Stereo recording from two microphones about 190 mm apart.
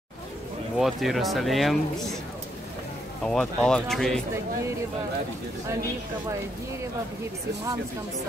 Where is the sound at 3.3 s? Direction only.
5° left (ahead or behind).